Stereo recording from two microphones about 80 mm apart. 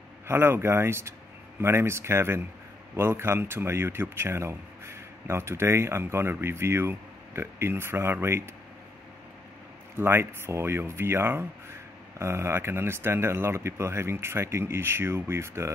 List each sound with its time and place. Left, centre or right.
0.3 s speech: right
9.9 s speech: right